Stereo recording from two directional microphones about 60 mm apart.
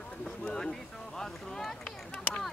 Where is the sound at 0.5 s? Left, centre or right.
Centre.